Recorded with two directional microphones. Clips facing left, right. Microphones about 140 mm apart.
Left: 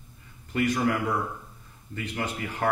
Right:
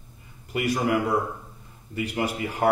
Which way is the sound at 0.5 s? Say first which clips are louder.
Right 1 dB; 15° right (ahead or behind).